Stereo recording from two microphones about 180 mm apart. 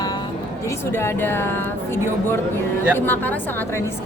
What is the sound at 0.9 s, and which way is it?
Speech, 10° left (ahead or behind).